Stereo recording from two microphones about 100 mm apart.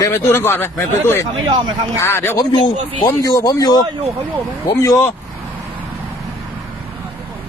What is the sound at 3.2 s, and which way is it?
Speech, 35° left (ahead or behind).